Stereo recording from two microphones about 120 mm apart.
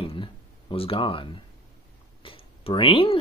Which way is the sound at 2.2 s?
50° left (ahead or behind).